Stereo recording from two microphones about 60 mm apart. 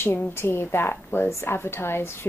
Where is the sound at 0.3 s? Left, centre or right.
Left.